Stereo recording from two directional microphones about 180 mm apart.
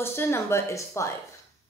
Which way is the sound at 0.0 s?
15° left (ahead or behind).